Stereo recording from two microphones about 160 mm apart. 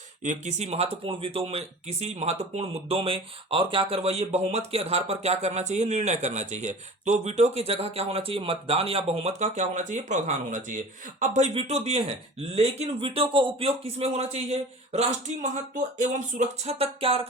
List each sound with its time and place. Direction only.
0.2 s speech: 45° right (ahead or behind)